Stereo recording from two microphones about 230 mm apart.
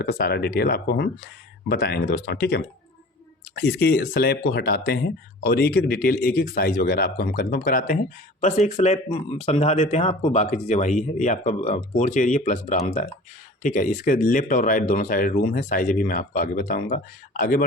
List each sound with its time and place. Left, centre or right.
0.0 s speech: left